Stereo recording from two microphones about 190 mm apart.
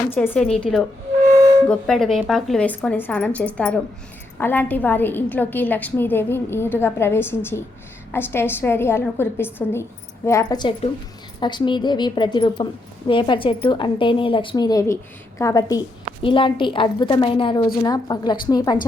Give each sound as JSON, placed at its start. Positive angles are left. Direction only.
{"t": 0.1, "sound": "a woman's voice", "side_deg": 10}